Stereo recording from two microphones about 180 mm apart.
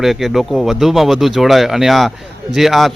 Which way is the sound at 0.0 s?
Centre (ahead or behind).